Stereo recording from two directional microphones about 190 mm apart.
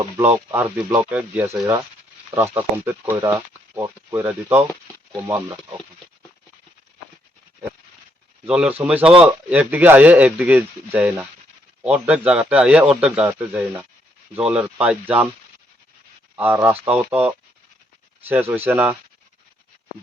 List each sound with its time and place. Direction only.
0.5 s speech: 15° right (ahead or behind)
8.4 s speech: 5° right (ahead or behind)
16.3 s speech: 10° right (ahead or behind)